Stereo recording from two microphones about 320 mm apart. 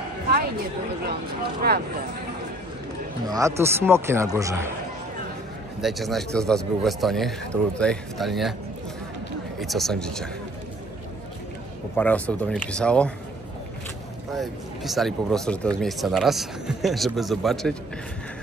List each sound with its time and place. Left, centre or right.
1.6 s speech: right
3.3 s speech: centre
5.8 s speech: centre
9.6 s speech: centre
12.0 s speech: centre
14.3 s speech: centre